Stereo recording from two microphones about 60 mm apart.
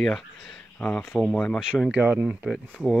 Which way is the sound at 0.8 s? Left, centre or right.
Left.